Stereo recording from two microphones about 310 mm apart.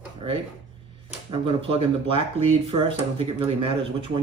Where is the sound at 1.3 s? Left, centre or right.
Centre.